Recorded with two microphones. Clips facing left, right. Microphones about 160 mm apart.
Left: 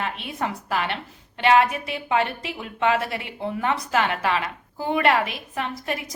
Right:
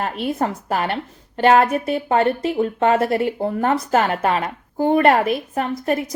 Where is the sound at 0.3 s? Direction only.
40° right (ahead or behind).